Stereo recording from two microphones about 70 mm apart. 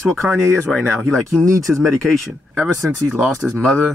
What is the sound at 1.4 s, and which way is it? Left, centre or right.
Speech, right.